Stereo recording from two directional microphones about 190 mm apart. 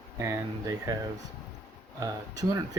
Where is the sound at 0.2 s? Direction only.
15° right (ahead or behind).